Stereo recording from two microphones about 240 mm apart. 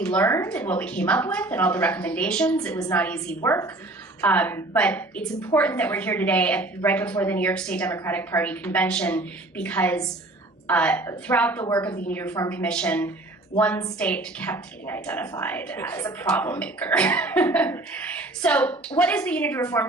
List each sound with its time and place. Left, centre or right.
0.0 s a woman's voice: centre